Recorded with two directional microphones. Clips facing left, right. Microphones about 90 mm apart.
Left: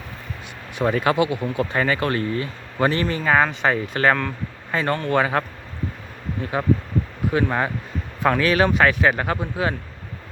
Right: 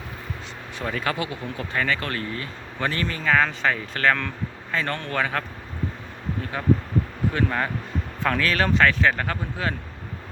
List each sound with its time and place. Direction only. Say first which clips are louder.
0.8 s speech: left 8 dB; 20° left (ahead or behind)
4.7 s speech: left 5 dB; 10° left (ahead or behind)
5.1 s speech: left 5 dB; 20° left (ahead or behind)
6.6 s speech: left 1 dB; 20° left (ahead or behind)